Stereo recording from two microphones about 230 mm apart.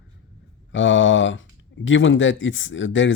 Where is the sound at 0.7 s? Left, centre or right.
Left.